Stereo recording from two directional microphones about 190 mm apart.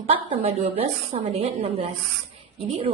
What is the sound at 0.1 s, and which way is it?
A woman's voice, 30° right (ahead or behind).